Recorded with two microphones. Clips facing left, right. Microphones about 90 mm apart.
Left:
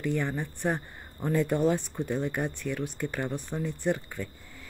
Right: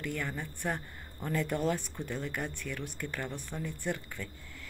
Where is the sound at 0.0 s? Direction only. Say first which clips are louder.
Left 7 dB; 20° left (ahead or behind).